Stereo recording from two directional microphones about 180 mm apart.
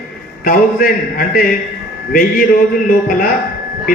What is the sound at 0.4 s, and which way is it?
A man's voice, 50° left (ahead or behind).